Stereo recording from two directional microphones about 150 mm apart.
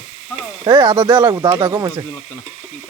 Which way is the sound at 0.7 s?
30° right (ahead or behind).